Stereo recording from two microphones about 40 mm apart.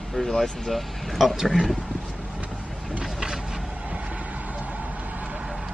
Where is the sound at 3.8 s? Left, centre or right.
Right.